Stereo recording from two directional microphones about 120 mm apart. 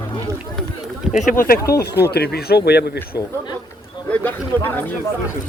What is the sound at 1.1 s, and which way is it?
Speech, 90° left.